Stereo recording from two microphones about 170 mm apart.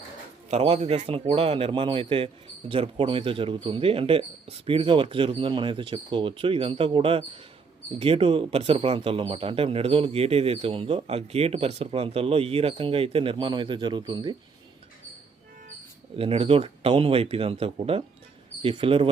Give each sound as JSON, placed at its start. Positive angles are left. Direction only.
{"t": 0.5, "sound": "a man's voice", "side_deg": -35}
{"t": 16.1, "sound": "a man's voice", "side_deg": -35}